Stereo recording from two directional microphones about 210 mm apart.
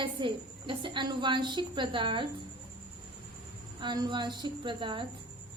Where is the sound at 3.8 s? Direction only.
20° right (ahead or behind).